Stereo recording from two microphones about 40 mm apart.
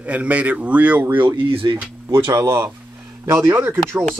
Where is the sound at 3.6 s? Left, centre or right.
Right.